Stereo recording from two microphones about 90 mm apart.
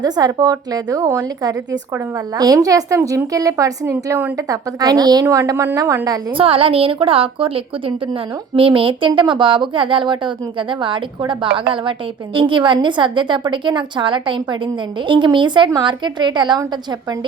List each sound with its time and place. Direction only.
0.0 s a woman's voice: 50° right (ahead or behind)
6.3 s a woman's voice: 90° right; by 16.6 s 55° right (ahead or behind)